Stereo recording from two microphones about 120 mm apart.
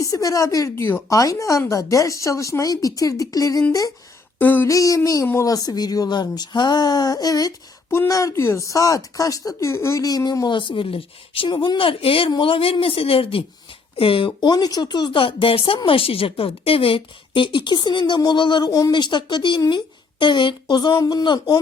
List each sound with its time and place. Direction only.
0.0 s speech: 30° left (ahead or behind)
4.4 s a sound: 15° left (ahead or behind)
4.7 s speech: 30° left (ahead or behind)